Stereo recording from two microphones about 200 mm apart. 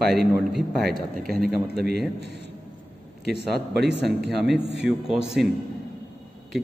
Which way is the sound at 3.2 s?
55° right (ahead or behind).